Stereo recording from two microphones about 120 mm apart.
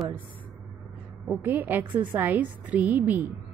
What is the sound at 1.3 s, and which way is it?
A woman's voice, 15° right (ahead or behind).